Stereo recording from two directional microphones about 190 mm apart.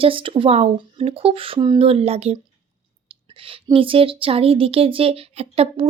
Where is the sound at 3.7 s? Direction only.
30° right (ahead or behind).